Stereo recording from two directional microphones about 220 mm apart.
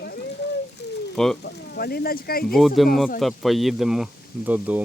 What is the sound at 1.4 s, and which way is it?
Speech, 45° left (ahead or behind).